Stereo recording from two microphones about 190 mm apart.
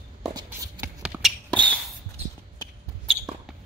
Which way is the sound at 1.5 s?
5° left (ahead or behind).